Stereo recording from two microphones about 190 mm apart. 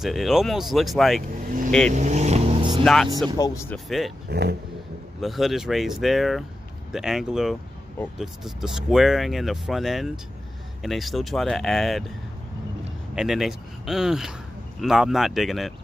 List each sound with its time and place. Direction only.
0.0 s speech: centre (ahead or behind)
1.9 s vehicle: 40° right (ahead or behind)
2.8 s speech: centre (ahead or behind)
3.3 s speech: 20° left (ahead or behind)
3.7 s speech: centre (ahead or behind)
4.3 s speech: 60° right (ahead or behind)
5.2 s speech: centre (ahead or behind)
13.1 s speech: 5° right (ahead or behind)